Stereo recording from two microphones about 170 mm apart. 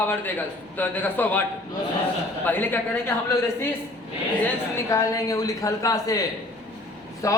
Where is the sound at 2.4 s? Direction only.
10° left (ahead or behind).